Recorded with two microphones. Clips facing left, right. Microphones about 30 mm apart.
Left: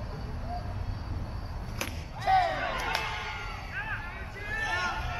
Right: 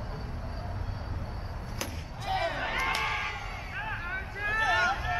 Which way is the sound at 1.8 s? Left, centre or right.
Centre.